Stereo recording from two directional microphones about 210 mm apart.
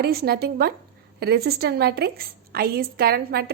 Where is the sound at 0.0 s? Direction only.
50° right (ahead or behind).